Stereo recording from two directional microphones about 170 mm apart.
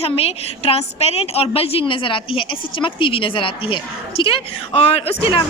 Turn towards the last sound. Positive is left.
turn(degrees=35)  # may be behind; listen again after turning